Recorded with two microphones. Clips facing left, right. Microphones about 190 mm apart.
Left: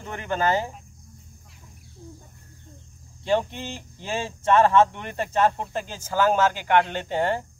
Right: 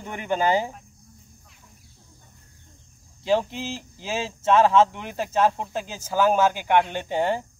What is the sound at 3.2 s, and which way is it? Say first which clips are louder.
Speech: right 1 dB; 5° right (ahead or behind).